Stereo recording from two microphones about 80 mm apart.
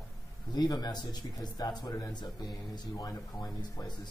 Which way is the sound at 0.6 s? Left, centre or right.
Left.